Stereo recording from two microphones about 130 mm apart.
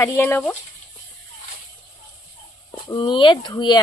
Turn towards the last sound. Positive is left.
turn(degrees=35)  # may be behind; listen again after turning